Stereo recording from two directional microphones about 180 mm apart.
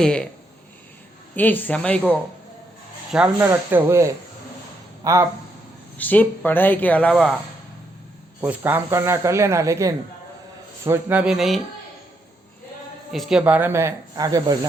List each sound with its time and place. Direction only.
0.0 s speech: 5° left (ahead or behind)
1.4 s speech: 10° left (ahead or behind)
3.1 s speech: 10° right (ahead or behind)
6.0 s speech: 10° left (ahead or behind)
8.4 s speech: 10° right (ahead or behind)
13.1 s speech: centre (ahead or behind); by 14.7 s 20° right (ahead or behind)